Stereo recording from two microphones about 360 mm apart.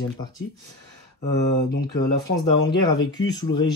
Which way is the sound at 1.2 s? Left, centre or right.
Left.